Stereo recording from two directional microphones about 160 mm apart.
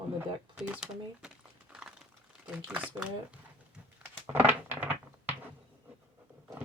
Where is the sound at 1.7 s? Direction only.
5° right (ahead or behind).